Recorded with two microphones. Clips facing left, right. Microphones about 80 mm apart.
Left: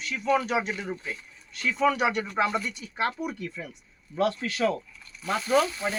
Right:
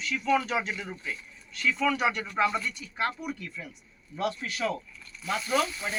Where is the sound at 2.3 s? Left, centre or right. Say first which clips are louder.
Left 1 dB; left.